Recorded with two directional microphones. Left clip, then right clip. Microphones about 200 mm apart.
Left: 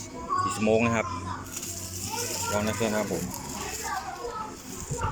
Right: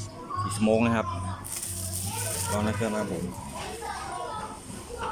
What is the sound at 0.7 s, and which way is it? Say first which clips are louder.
Speech: right 1 dB; 10° right (ahead or behind).